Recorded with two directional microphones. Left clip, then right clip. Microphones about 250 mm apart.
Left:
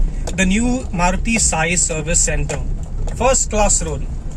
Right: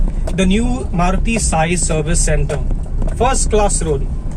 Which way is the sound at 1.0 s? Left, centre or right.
Centre.